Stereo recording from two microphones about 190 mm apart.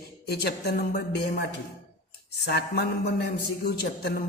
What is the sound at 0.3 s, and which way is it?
A man's voice, 60° left (ahead or behind).